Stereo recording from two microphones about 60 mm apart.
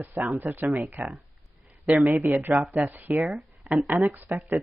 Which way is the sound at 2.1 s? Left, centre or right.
Right.